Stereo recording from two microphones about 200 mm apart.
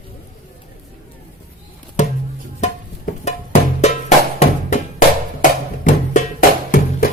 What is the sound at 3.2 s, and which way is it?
Music, 35° left (ahead or behind).